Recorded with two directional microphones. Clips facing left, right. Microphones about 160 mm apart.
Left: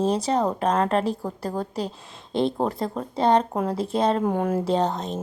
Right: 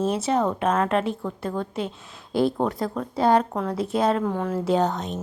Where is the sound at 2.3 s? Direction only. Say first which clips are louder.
Right 1 dB; 5° right (ahead or behind).